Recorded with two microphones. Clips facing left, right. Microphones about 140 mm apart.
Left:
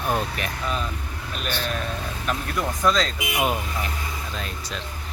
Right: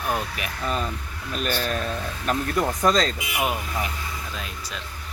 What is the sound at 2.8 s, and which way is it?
Speech, 45° right (ahead or behind).